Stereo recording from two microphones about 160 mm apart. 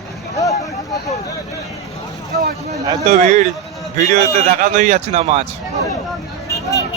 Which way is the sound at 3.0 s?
50° right (ahead or behind).